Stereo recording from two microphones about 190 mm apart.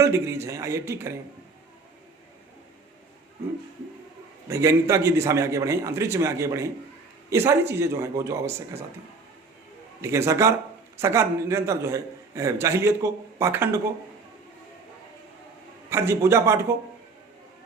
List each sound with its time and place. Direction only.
0.0 s a man's voice: 15° right (ahead or behind)
4.4 s a man's voice: 15° right (ahead or behind)
10.0 s a man's voice: 15° right (ahead or behind)
15.9 s a man's voice: 15° right (ahead or behind)